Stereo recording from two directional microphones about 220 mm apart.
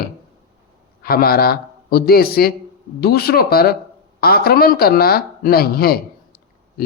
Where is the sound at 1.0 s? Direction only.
45° left (ahead or behind).